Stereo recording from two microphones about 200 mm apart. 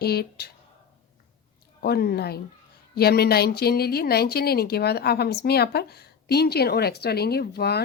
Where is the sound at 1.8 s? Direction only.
50° left (ahead or behind).